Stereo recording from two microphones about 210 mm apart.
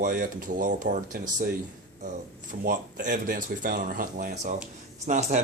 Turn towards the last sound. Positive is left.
turn(degrees=-35)  # may be behind; listen again after turning